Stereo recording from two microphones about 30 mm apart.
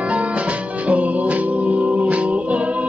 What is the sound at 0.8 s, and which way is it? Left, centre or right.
Music, right.